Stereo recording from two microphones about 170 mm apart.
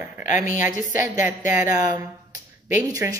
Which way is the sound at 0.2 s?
50° left (ahead or behind).